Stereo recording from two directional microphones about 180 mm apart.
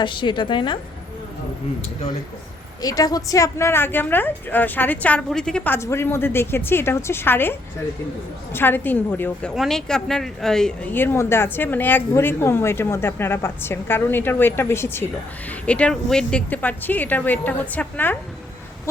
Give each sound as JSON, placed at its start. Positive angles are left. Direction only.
{"t": 0.0, "sound": "a woman's voice", "side_deg": 25}
{"t": 2.8, "sound": "speech", "side_deg": 20}
{"t": 8.5, "sound": "speech", "side_deg": 10}